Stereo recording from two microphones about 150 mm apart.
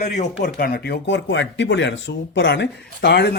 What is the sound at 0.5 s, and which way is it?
Speech, 90° left.